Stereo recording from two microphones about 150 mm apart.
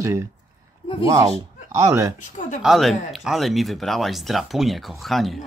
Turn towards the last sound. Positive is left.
turn(degrees=0)  # may be behind; listen again after turning